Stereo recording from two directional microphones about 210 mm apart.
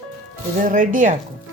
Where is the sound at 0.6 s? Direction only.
40° right (ahead or behind).